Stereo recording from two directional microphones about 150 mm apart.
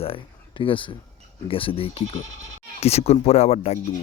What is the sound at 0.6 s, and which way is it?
Speech, 35° left (ahead or behind).